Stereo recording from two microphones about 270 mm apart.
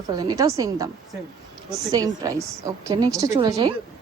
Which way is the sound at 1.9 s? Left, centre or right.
Centre.